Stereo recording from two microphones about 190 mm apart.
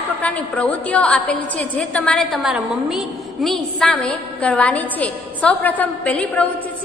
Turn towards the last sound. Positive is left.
turn(degrees=5)  # may be behind; listen again after turning